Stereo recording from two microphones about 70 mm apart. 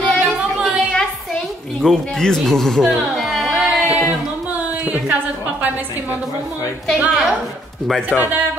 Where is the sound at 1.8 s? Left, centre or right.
Centre.